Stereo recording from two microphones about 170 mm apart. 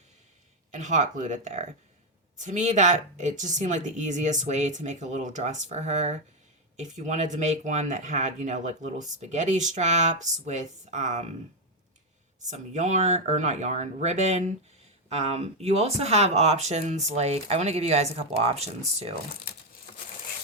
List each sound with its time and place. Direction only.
0.7 s speech: 45° right (ahead or behind)
12.5 s speech: 45° right (ahead or behind)